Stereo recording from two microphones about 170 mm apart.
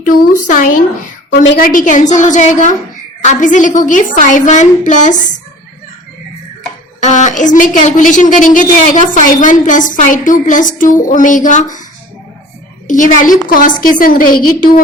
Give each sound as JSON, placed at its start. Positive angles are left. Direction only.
{"t": 0.0, "sound": "a woman's voice", "side_deg": 50}
{"t": 7.0, "sound": "a woman's voice", "side_deg": 45}
{"t": 12.9, "sound": "a woman's voice", "side_deg": 50}